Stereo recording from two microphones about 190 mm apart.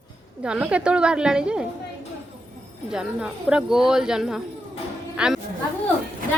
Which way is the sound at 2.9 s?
5° right (ahead or behind).